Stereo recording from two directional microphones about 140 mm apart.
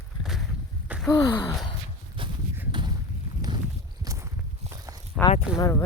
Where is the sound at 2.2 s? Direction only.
35° right (ahead or behind).